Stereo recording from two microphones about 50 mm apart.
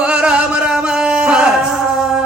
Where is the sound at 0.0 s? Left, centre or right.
Right.